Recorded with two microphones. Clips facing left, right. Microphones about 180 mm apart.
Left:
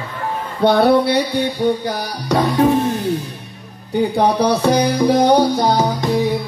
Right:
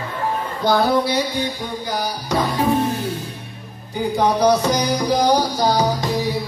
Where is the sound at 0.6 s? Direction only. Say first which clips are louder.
Left 5 dB; 65° left (ahead or behind).